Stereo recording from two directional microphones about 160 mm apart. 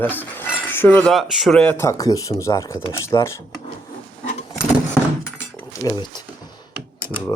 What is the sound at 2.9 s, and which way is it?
Cutlery, 15° left (ahead or behind).